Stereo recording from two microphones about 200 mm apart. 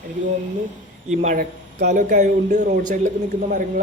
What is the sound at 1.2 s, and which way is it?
A man's voice, 35° right (ahead or behind).